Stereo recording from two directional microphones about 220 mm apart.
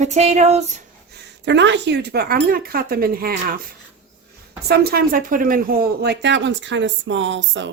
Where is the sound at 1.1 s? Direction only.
55° right (ahead or behind).